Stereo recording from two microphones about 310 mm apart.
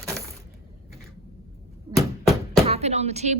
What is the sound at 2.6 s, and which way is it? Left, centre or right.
Speech, right.